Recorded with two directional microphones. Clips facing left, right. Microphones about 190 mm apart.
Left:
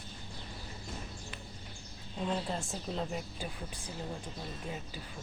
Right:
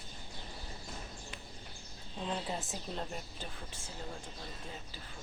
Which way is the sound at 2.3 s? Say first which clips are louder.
Left 3 dB; 5° right (ahead or behind).